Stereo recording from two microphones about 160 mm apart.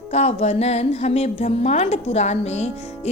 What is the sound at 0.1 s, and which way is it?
A woman's voice, 40° left (ahead or behind).